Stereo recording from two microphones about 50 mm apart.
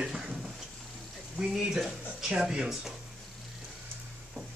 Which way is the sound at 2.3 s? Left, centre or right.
Centre.